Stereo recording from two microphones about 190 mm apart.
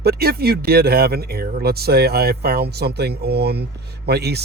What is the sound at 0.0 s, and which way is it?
Speech, 55° right (ahead or behind).